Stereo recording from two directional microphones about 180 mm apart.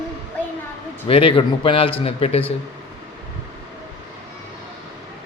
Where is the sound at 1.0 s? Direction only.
30° left (ahead or behind).